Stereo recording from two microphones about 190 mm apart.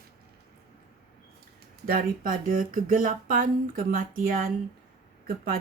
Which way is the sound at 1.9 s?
45° right (ahead or behind).